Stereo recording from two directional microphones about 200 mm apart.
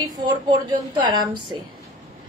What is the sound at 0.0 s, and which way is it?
A woman's voice, 20° right (ahead or behind).